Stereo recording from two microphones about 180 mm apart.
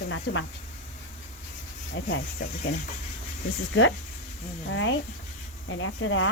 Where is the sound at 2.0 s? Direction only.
90° left.